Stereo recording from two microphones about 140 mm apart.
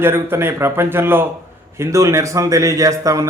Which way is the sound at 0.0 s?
15° right (ahead or behind).